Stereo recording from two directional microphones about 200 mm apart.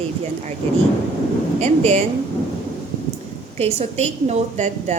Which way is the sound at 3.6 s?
30° right (ahead or behind).